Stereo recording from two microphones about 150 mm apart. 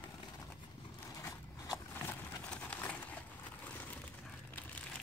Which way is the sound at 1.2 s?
20° left (ahead or behind).